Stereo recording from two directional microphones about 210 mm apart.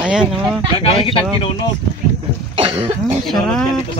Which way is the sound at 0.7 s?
25° left (ahead or behind).